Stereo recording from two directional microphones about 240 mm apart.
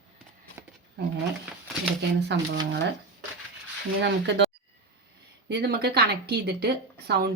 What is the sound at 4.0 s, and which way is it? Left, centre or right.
Speech, right.